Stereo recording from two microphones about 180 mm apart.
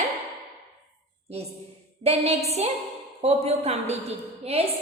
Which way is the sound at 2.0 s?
35° right (ahead or behind).